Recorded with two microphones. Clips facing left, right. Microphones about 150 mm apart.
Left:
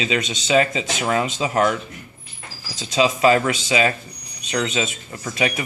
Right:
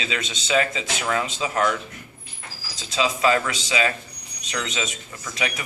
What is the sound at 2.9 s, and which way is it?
Speech, 20° left (ahead or behind).